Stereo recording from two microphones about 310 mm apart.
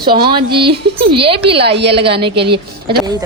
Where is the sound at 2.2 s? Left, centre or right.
Centre.